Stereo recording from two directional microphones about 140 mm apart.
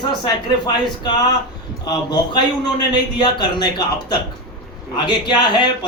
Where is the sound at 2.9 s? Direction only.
30° left (ahead or behind).